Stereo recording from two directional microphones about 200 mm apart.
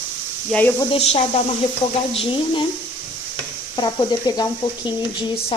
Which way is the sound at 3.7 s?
20° left (ahead or behind).